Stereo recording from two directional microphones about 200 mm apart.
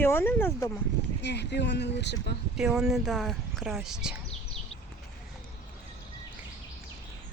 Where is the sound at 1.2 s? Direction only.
60° left (ahead or behind).